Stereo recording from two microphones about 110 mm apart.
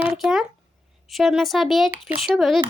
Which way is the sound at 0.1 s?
Centre (ahead or behind).